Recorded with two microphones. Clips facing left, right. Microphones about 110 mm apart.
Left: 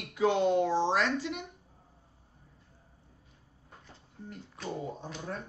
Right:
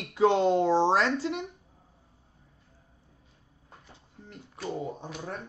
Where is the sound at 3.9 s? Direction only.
15° right (ahead or behind).